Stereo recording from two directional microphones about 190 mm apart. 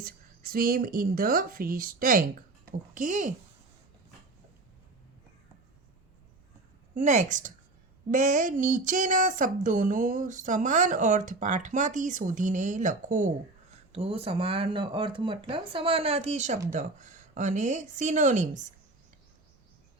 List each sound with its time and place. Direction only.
0.0 s speech: 50° right (ahead or behind)
6.9 s speech: 40° right (ahead or behind)
13.9 s speech: 30° right (ahead or behind)